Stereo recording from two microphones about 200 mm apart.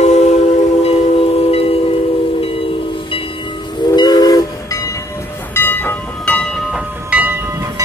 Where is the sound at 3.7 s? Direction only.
20° left (ahead or behind).